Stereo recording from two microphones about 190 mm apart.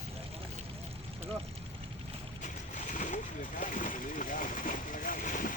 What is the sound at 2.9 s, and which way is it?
Vehicle, 40° left (ahead or behind).